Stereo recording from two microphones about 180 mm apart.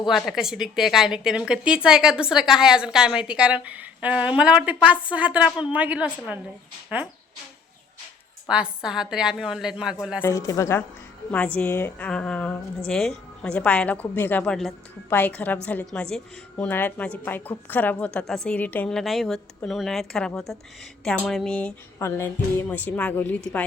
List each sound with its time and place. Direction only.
0.1 s a woman's voice: centre (ahead or behind)
8.4 s a woman's voice: 5° right (ahead or behind)
10.2 s music: 15° left (ahead or behind)
15.6 s a woman's voice: 10° left (ahead or behind)
21.0 s music: 5° left (ahead or behind)